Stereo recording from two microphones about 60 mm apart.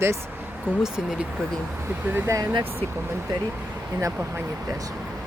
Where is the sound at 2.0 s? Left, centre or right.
Right.